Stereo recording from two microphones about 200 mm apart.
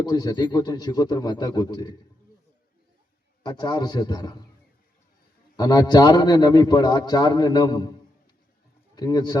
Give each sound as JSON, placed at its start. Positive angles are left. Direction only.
{"t": 0.0, "sound": "a man's voice", "side_deg": 20}
{"t": 3.4, "sound": "a man's voice", "side_deg": 20}
{"t": 5.5, "sound": "a man's voice", "side_deg": 20}
{"t": 9.0, "sound": "a man's voice", "side_deg": 20}